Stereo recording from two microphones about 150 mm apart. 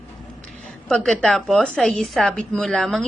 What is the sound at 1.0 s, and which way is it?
A woman's voice, 5° left (ahead or behind).